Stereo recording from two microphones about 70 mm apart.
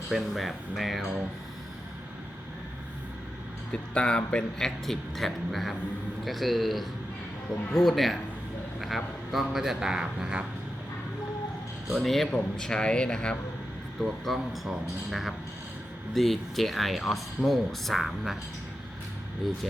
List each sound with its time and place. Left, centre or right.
0.1 s speech: centre
3.7 s a man's voice: centre
11.9 s a man's voice: centre
14.0 s speech: centre